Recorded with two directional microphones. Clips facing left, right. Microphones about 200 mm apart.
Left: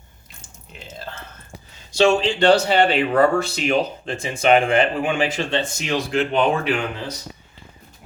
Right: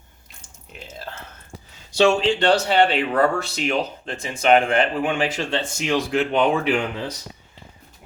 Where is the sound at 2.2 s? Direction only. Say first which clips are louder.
Left 2 dB; centre (ahead or behind).